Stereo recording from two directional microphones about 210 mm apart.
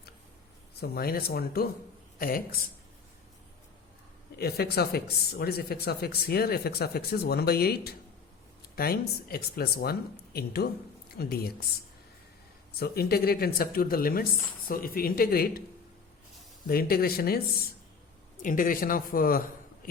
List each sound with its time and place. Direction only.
0.8 s speech: 45° left (ahead or behind)
4.4 s speech: 50° left (ahead or behind)
12.8 s speech: 45° left (ahead or behind)
16.6 s speech: 45° left (ahead or behind)